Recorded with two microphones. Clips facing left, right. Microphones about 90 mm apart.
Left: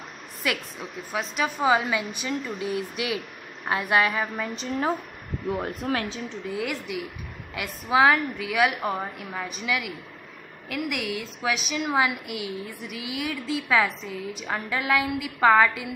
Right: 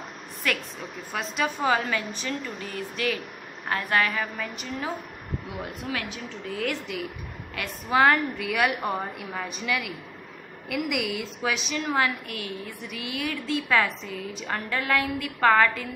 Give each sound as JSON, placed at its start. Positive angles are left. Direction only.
{"t": 0.4, "sound": "a woman's voice", "side_deg": 10}
{"t": 5.6, "sound": "speech", "side_deg": 40}
{"t": 6.0, "sound": "a woman's voice", "side_deg": 25}
{"t": 7.5, "sound": "a woman's voice", "side_deg": 10}